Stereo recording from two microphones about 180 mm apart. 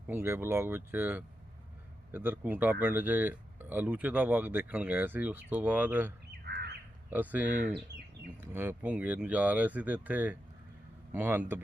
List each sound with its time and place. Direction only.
0.1 s speech: 10° right (ahead or behind)
6.4 s crow: 65° right (ahead or behind)
7.1 s speech: 10° right (ahead or behind)
7.4 s speech: 45° right (ahead or behind)
8.4 s speech: 15° right (ahead or behind)